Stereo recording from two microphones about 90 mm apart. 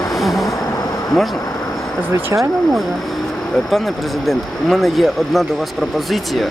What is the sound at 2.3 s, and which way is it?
Speech, 30° right (ahead or behind).